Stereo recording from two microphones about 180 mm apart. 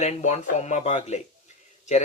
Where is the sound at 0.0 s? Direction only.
40° left (ahead or behind).